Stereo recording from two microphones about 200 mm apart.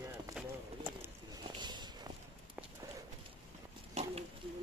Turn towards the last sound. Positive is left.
turn(degrees=-30)  # may be behind; listen again after turning